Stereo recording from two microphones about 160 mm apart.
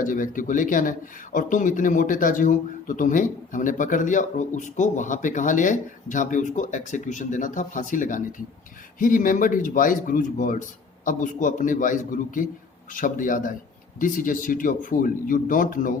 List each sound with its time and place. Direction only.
0.0 s a man's voice: 55° left (ahead or behind)